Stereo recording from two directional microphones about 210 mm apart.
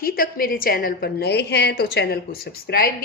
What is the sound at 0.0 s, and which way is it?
A woman's voice, 45° left (ahead or behind).